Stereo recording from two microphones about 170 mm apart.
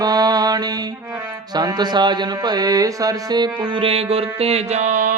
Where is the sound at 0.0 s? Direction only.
25° right (ahead or behind).